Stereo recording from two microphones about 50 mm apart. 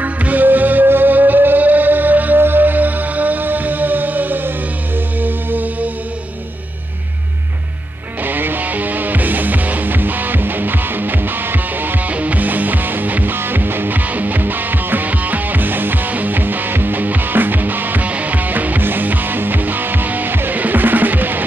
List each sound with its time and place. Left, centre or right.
0.0 s music: right
8.2 s music: right